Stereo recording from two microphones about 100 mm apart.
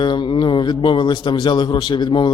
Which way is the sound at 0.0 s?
55° left (ahead or behind).